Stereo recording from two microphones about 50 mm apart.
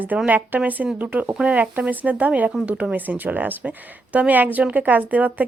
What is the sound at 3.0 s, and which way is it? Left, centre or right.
A woman's voice, right.